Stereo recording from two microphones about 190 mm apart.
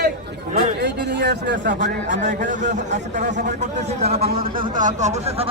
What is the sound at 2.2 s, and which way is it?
A man's voice, 40° right (ahead or behind).